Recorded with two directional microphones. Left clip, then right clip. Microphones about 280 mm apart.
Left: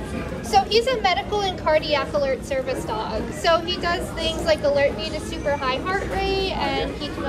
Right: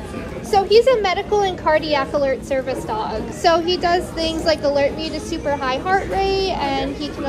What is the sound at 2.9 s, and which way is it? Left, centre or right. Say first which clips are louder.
Speech: right 3 dB; centre.